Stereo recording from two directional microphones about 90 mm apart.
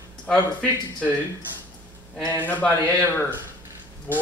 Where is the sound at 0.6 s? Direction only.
15° left (ahead or behind).